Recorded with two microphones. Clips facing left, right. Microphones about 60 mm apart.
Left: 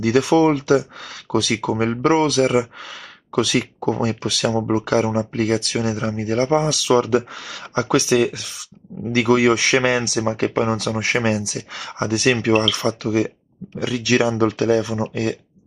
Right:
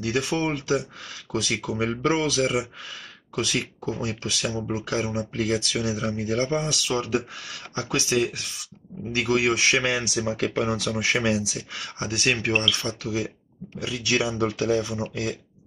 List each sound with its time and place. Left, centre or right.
0.0 s speech: left
4.5 s speech: left
6.7 s speech: left
10.2 s speech: left